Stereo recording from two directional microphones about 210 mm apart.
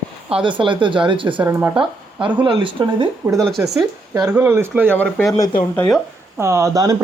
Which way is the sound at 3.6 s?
10° right (ahead or behind).